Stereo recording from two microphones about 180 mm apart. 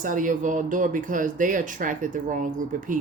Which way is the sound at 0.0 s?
45° right (ahead or behind).